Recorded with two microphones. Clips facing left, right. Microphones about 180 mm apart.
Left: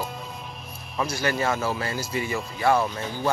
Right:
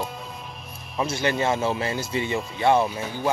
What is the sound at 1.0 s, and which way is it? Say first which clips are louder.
Speech: right 2 dB; 25° right (ahead or behind).